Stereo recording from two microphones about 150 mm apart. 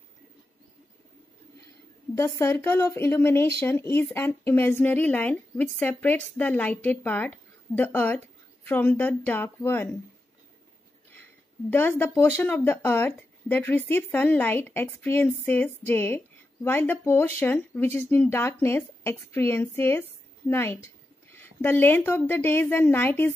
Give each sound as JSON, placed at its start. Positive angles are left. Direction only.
{"t": 2.2, "sound": "speech", "side_deg": 15}
{"t": 11.7, "sound": "speech", "side_deg": 15}